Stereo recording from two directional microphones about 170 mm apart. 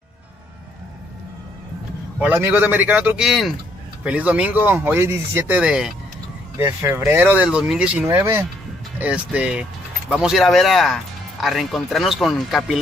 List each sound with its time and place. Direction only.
2.1 s speech: 10° right (ahead or behind)
6.5 s speech: 15° right (ahead or behind); by 12.7 s centre (ahead or behind)